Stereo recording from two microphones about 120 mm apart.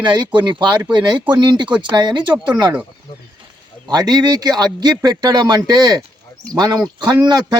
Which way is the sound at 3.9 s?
35° right (ahead or behind).